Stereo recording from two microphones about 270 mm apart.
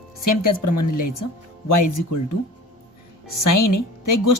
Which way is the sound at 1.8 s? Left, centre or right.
Left.